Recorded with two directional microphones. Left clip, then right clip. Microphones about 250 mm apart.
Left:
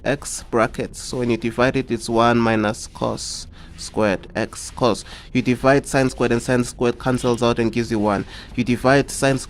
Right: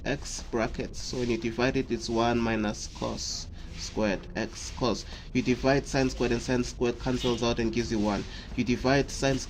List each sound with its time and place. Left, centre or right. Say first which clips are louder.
0.0 s speech: left 10 dB; left